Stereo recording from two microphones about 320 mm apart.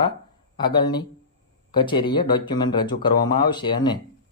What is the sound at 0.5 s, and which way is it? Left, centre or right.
Speech, centre.